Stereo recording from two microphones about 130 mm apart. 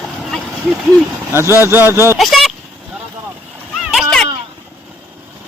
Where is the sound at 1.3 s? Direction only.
20° right (ahead or behind).